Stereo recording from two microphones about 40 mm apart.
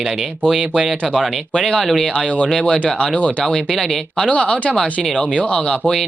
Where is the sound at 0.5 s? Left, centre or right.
Centre.